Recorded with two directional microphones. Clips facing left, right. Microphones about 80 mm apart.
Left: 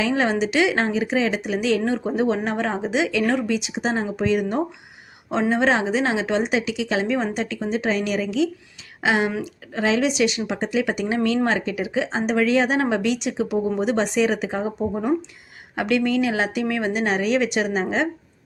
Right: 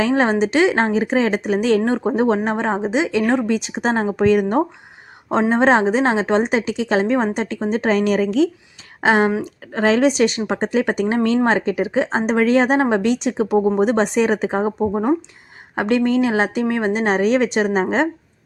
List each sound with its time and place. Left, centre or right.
0.0 s speech: right